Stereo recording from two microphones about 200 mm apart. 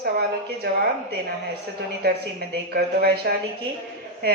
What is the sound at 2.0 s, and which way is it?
A woman's voice, 50° right (ahead or behind).